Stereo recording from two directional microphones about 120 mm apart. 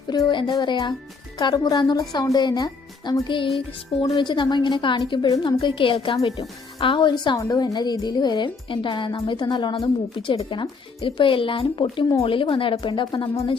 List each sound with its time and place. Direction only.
0.1 s a woman's voice: 40° left (ahead or behind)
7.3 s a woman's voice: 30° left (ahead or behind)